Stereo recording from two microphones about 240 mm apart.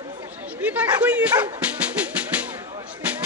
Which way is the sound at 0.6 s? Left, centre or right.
Centre.